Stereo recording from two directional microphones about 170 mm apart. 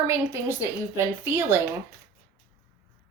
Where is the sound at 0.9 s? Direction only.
15° right (ahead or behind).